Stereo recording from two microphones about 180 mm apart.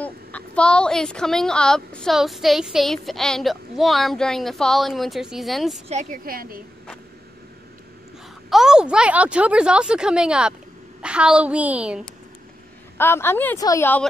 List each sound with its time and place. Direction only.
0.0 s a woman's voice: 5° left (ahead or behind)
5.9 s a woman's voice: 40° right (ahead or behind)
6.2 s a woman's voice: 55° right (ahead or behind)
8.5 s a woman's voice: centre (ahead or behind)
12.9 s a woman's voice: 15° left (ahead or behind)